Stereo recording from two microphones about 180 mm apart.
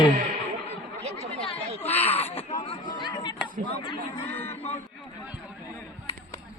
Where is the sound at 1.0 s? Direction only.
35° right (ahead or behind).